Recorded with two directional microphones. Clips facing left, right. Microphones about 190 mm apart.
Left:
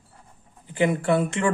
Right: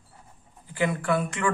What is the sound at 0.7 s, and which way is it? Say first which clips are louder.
Speech: left 4 dB; 25° left (ahead or behind).